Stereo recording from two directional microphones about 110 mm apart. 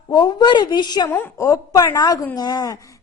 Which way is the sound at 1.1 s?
30° left (ahead or behind).